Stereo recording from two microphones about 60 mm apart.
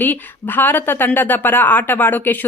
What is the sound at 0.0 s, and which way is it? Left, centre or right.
A woman's voice, left.